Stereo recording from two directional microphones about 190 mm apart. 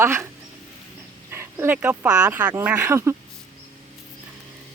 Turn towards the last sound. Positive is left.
turn(degrees=-15)  # may be behind; listen again after turning